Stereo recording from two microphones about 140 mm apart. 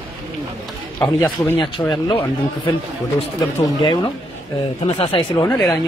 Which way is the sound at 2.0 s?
35° left (ahead or behind).